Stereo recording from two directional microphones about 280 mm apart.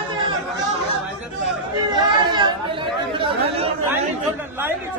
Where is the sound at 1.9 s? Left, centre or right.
Centre.